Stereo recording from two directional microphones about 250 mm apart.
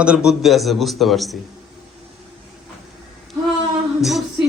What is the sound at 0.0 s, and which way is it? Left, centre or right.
A woman's voice, centre.